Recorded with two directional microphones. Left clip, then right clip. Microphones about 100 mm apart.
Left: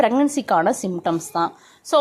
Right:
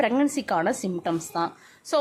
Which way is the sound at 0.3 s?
30° left (ahead or behind).